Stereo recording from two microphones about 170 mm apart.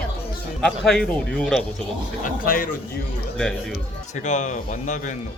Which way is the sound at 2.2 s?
55° left (ahead or behind).